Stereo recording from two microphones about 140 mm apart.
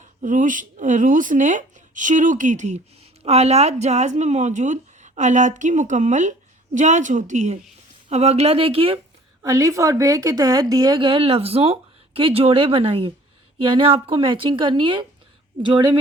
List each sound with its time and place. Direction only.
0.0 s speech: 65° right (ahead or behind); by 9.0 s 40° right (ahead or behind)
9.4 s a woman's voice: 25° right (ahead or behind)